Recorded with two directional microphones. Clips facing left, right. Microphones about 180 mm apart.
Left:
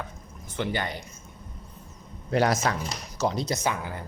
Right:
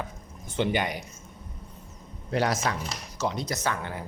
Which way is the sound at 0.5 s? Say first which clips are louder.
Right 3 dB; 20° right (ahead or behind).